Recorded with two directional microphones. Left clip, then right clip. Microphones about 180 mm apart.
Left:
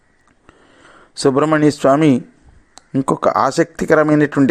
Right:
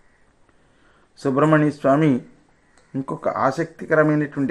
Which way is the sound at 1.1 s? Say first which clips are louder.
Left 4 dB; 45° left (ahead or behind).